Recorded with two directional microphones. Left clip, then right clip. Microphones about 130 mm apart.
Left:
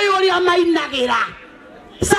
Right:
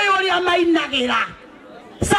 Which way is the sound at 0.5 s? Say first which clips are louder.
Left 1 dB; 30° right (ahead or behind).